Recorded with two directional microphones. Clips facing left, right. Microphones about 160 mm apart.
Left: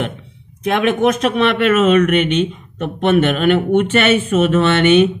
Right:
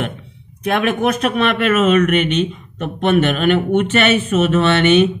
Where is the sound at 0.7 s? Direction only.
30° left (ahead or behind).